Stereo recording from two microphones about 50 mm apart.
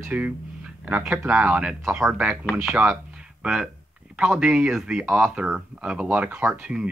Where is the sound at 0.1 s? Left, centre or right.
Right.